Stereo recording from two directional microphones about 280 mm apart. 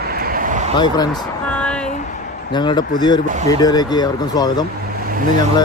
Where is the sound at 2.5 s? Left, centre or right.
Centre.